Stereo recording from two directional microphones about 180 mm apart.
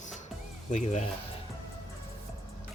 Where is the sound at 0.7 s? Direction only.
40° left (ahead or behind).